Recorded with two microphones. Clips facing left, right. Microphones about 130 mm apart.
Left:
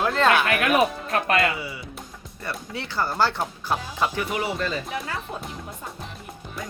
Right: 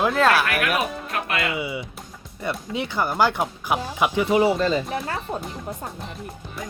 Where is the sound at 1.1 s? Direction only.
35° left (ahead or behind).